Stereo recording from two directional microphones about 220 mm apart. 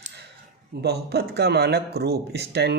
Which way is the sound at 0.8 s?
45° right (ahead or behind).